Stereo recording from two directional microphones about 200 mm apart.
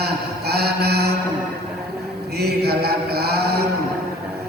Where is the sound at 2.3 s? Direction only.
50° right (ahead or behind).